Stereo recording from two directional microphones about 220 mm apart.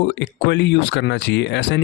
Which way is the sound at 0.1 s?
50° left (ahead or behind).